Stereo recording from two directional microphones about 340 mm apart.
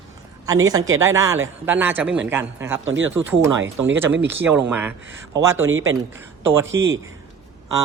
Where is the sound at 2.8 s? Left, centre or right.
Right.